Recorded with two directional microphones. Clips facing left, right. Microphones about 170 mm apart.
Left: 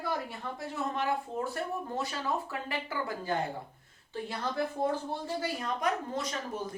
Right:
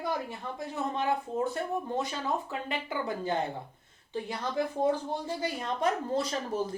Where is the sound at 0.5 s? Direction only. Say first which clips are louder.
Right 2 dB; 20° right (ahead or behind).